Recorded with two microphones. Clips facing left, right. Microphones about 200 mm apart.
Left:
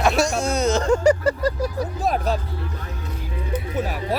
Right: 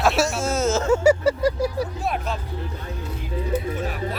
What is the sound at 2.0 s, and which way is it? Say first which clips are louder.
Speech: left 4 dB; 40° left (ahead or behind).